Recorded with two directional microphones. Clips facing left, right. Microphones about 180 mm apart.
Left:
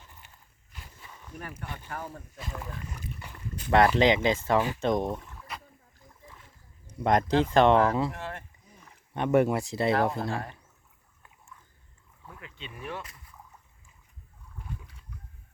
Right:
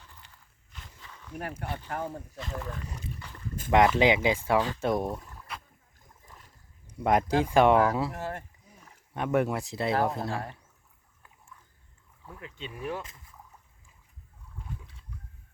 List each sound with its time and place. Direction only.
0.0 s walk: 15° left (ahead or behind)
1.4 s speech: 60° right (ahead or behind)
3.7 s speech: 10° right (ahead or behind)
6.2 s a sound: 40° right (ahead or behind)
7.0 s speech: 5° right (ahead or behind)
8.1 s speech: 40° right (ahead or behind)
9.1 s speech: centre (ahead or behind)
12.4 s speech: 40° right (ahead or behind)
13.0 s speech: 25° right (ahead or behind)